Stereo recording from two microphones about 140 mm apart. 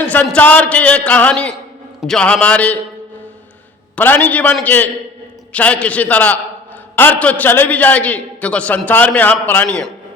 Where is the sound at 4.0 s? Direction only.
15° left (ahead or behind).